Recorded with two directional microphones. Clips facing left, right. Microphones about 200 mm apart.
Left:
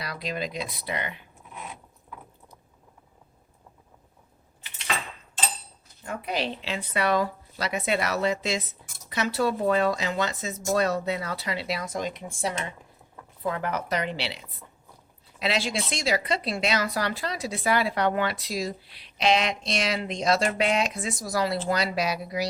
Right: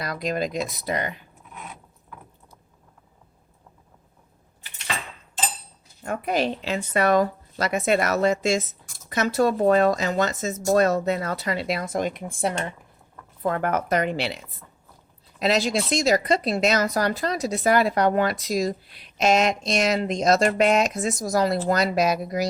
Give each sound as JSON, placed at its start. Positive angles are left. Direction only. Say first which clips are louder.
{"t": 0.0, "sound": "speech", "louder": "right 6 dB", "side_deg": -45}
{"t": 6.0, "sound": "speech", "louder": "right 6 dB", "side_deg": -55}